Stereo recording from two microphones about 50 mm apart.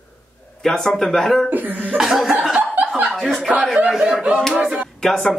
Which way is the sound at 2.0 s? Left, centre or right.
Centre.